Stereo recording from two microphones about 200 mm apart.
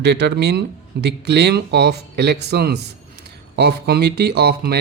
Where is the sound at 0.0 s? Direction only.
60° right (ahead or behind).